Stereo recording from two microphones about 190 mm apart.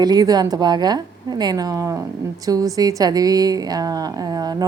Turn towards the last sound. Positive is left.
turn(degrees=-20)  # may be behind; listen again after turning